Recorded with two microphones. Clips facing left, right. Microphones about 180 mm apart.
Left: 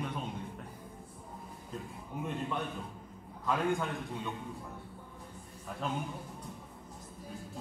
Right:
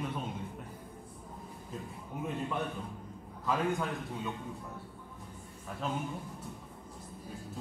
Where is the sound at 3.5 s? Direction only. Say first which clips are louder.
Even; centre (ahead or behind).